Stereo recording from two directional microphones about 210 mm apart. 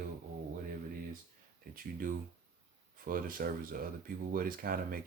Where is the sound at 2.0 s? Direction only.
40° right (ahead or behind).